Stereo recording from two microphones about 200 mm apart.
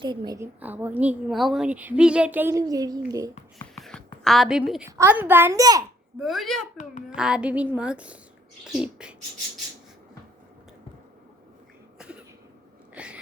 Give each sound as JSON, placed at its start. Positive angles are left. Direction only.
{"t": 0.0, "sound": "a woman's voice", "side_deg": -20}
{"t": 3.8, "sound": "a sound", "side_deg": 0}
{"t": 4.9, "sound": "a woman's voice", "side_deg": -10}
{"t": 6.1, "sound": "a woman's voice", "side_deg": 0}
{"t": 6.7, "sound": "a child's voice", "side_deg": 40}
{"t": 7.2, "sound": "a woman's voice", "side_deg": -5}
{"t": 12.9, "sound": "a sound", "side_deg": -5}